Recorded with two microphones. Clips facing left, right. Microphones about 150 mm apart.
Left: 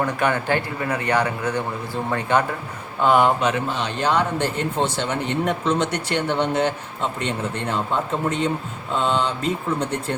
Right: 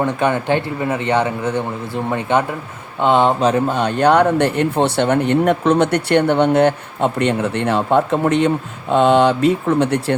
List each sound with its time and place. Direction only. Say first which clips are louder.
0.0 s a man's voice: right 4 dB; 20° right (ahead or behind)
3.4 s speech: right 7 dB; 45° right (ahead or behind); by 10.2 s 75° right (ahead or behind)